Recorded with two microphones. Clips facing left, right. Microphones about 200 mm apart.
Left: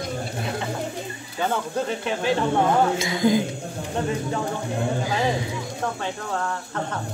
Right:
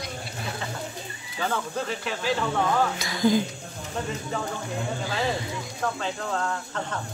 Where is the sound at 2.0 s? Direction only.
25° left (ahead or behind).